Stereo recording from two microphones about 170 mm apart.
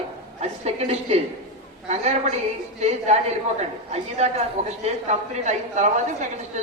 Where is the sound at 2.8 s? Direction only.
40° right (ahead or behind).